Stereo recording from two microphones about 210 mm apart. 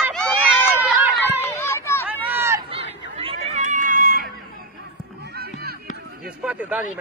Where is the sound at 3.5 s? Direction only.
35° right (ahead or behind).